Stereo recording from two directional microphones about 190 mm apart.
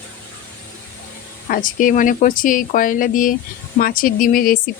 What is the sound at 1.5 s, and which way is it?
Speech, 45° left (ahead or behind).